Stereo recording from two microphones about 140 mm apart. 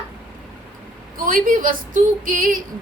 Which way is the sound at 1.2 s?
80° right.